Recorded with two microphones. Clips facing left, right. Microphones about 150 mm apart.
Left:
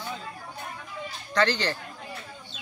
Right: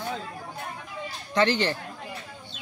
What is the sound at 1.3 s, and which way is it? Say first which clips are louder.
Speech: right 2 dB; 20° right (ahead or behind).